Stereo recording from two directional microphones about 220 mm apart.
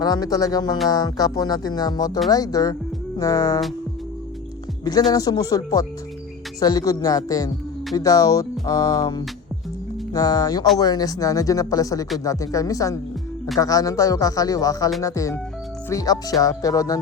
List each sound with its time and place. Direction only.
0.0 s speech: 20° left (ahead or behind)
5.1 s speech: 15° left (ahead or behind)